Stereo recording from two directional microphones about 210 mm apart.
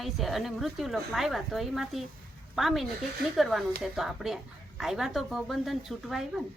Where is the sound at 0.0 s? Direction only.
Centre (ahead or behind).